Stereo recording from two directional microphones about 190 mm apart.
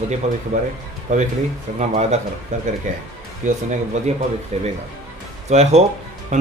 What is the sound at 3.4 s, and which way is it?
A man's voice, 40° right (ahead or behind).